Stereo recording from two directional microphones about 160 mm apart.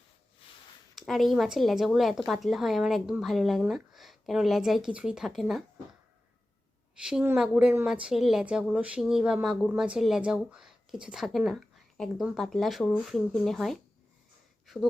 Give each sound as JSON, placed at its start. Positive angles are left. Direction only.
{"t": 0.9, "sound": "speech", "side_deg": 0}
{"t": 6.9, "sound": "speech", "side_deg": -5}